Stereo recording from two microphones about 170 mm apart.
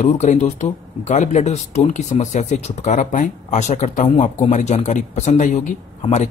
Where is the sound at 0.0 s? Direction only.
45° left (ahead or behind).